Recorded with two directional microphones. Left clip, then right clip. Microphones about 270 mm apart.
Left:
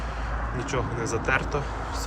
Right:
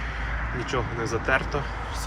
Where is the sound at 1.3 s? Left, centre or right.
Centre.